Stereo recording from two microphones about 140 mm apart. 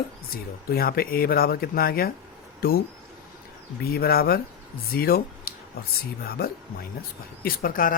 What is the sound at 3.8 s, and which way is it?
Speech, 90° left.